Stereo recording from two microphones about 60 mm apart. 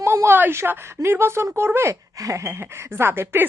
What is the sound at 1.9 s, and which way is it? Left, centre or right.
Speech, right.